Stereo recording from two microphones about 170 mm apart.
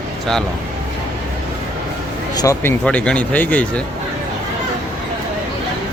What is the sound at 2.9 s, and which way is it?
Speech, 5° left (ahead or behind).